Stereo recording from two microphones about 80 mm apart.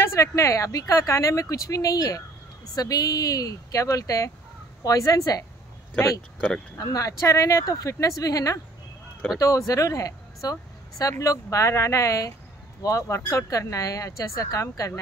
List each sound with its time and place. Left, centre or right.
0.0 s speech: left